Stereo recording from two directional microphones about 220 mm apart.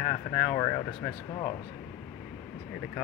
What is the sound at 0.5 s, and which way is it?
Speech, 20° left (ahead or behind).